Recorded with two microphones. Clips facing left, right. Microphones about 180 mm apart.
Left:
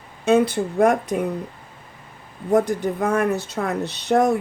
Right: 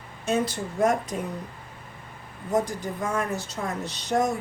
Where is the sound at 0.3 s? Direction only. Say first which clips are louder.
Left 8 dB; 60° left (ahead or behind).